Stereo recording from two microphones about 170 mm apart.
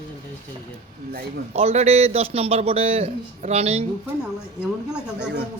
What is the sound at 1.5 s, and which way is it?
A man's voice, 35° right (ahead or behind).